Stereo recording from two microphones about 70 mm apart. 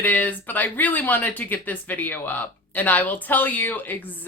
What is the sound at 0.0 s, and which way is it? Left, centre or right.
Speech, left.